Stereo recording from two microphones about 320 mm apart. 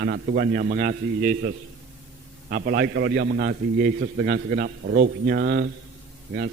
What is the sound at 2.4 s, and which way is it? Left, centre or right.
A man's voice, right.